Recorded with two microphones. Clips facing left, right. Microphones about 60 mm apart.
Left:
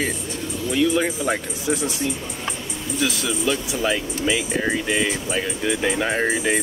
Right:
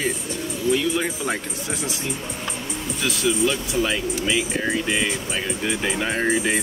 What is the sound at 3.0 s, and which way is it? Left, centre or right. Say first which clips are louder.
Speech: right 3 dB; centre.